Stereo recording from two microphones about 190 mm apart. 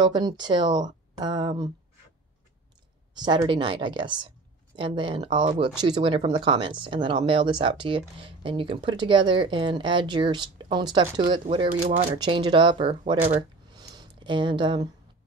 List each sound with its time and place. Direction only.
0.0 s speech: 20° right (ahead or behind)
3.2 s speech: 20° right (ahead or behind)
13.7 s a sound: 25° right (ahead or behind)